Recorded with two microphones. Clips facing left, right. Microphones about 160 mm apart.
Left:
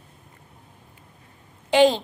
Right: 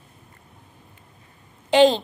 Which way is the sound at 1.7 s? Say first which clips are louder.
Right 1 dB; 10° left (ahead or behind).